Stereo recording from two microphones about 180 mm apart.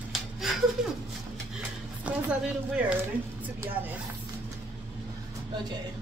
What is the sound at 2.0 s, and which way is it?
Speech, 10° right (ahead or behind).